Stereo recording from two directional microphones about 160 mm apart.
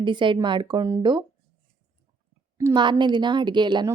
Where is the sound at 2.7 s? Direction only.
30° right (ahead or behind).